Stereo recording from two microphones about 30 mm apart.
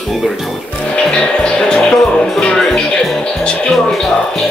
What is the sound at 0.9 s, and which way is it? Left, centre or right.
Music, left.